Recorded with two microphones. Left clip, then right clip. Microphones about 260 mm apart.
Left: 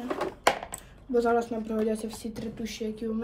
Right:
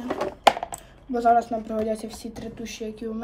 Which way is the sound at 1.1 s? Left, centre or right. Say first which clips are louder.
Right 5 dB; centre.